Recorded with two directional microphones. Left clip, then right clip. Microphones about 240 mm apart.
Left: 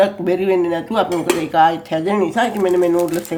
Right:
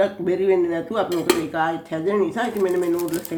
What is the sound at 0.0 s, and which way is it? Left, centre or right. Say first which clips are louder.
Speech: left 4 dB; left.